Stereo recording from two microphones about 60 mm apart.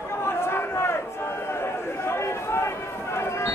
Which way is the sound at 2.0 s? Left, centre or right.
Left.